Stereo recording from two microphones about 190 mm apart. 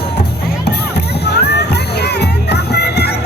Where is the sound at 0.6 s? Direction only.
60° left (ahead or behind).